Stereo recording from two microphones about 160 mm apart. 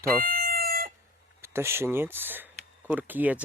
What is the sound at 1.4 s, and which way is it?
Speech, 15° right (ahead or behind).